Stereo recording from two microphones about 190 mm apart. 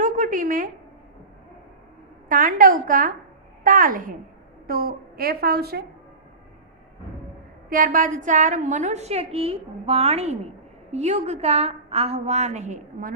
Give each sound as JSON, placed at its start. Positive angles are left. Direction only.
{"t": 0.0, "sound": "a sound", "side_deg": -45}
{"t": 2.3, "sound": "a woman's voice", "side_deg": -45}
{"t": 7.7, "sound": "a woman's voice", "side_deg": -45}